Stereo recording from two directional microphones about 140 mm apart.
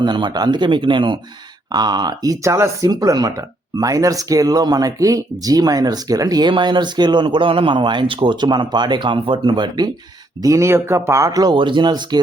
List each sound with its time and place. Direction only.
0.0 s speech: 35° right (ahead or behind)